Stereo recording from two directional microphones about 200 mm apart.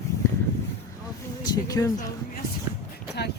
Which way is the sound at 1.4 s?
20° left (ahead or behind).